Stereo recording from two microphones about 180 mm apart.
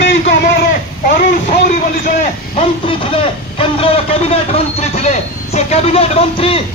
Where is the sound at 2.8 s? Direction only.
30° left (ahead or behind).